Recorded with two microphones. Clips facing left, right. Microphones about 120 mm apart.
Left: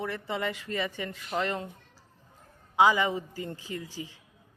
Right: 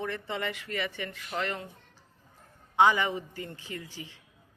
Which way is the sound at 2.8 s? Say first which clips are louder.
Left 1 dB; 15° left (ahead or behind).